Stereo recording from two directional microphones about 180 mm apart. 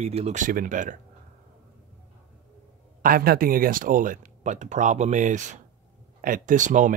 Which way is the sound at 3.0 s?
55° right (ahead or behind).